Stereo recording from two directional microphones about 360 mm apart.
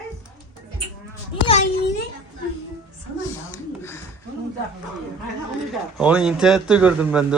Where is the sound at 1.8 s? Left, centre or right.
Left.